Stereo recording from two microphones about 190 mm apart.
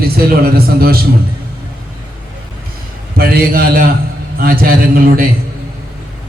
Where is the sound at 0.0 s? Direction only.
50° right (ahead or behind).